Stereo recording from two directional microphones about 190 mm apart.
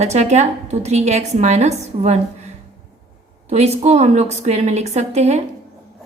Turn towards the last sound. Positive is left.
turn(degrees=-35)  # may be behind; listen again after turning